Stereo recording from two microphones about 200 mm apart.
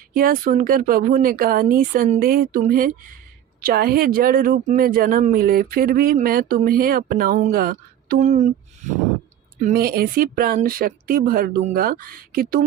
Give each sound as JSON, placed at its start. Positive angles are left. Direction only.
{"t": 0.1, "sound": "speech", "side_deg": -45}
{"t": 9.6, "sound": "speech", "side_deg": -45}